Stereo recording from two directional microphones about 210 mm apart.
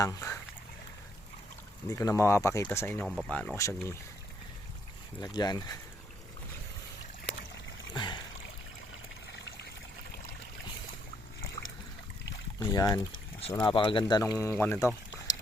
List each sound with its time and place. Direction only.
0.0 s speech: 15° left (ahead or behind)
1.9 s speech: 15° left (ahead or behind)
5.2 s speech: 20° left (ahead or behind)
7.9 s a sound: 20° left (ahead or behind)
9.6 s trickle: 50° left (ahead or behind)
12.5 s speech: 15° left (ahead or behind)